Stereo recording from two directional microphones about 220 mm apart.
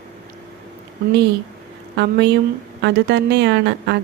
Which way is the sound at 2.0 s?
50° right (ahead or behind).